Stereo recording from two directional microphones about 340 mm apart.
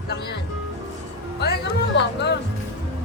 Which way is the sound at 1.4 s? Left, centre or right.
Left.